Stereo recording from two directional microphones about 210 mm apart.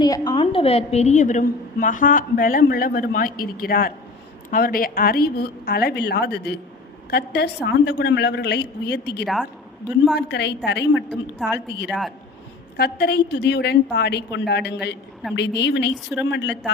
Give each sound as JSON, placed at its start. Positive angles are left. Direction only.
{"t": 0.0, "sound": "a woman's voice", "side_deg": 20}
{"t": 9.2, "sound": "a woman's voice", "side_deg": 0}
{"t": 10.2, "sound": "speech", "side_deg": 55}
{"t": 11.1, "sound": "a woman's voice", "side_deg": 0}
{"t": 12.7, "sound": "a woman's voice", "side_deg": 50}